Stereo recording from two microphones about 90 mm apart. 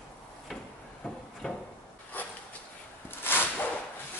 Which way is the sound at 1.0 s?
10° left (ahead or behind).